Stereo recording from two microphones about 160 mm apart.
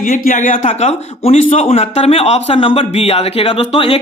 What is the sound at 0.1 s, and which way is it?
A man's voice, 55° left (ahead or behind).